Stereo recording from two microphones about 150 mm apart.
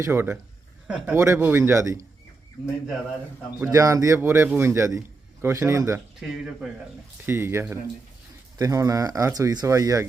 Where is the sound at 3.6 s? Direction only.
20° right (ahead or behind).